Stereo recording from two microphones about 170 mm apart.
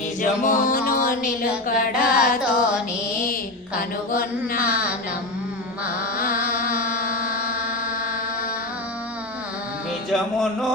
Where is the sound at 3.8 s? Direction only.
55° left (ahead or behind).